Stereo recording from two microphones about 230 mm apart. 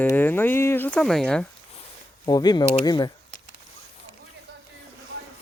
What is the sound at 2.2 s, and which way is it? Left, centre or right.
Speech, centre.